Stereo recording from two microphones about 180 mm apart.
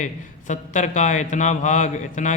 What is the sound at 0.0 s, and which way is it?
Speech, 40° left (ahead or behind).